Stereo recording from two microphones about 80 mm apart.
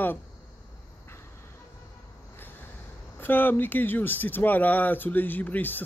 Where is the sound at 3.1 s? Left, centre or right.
Left.